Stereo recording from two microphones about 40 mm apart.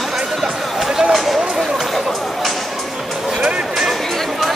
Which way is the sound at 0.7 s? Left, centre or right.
Centre.